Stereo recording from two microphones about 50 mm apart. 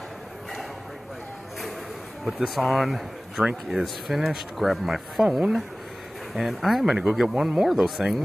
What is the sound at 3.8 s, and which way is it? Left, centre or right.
Speech, centre.